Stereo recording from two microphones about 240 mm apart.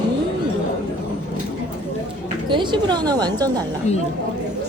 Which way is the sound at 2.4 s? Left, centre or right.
Centre.